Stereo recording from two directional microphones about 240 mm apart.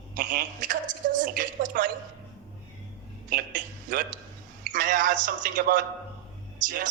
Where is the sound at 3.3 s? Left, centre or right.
Right.